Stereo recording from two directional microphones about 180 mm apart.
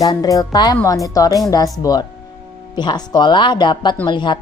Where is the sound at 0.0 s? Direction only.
20° left (ahead or behind).